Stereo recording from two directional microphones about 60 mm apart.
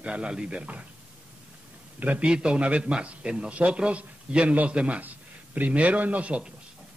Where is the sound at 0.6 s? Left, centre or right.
Right.